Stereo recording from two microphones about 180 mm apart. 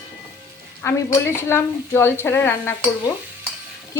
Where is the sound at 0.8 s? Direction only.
15° left (ahead or behind).